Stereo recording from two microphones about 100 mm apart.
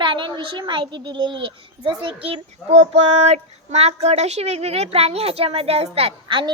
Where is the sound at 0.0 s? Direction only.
55° right (ahead or behind).